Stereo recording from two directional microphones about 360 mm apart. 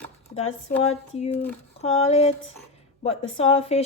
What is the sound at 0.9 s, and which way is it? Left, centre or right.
A woman's voice, centre.